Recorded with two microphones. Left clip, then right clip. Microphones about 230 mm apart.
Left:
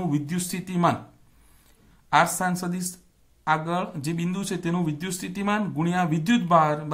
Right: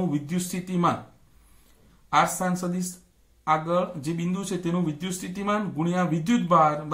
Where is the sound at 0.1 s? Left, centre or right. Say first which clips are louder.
Left 1 dB; left.